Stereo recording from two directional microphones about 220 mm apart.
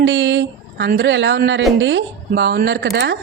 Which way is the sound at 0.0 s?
55° right (ahead or behind).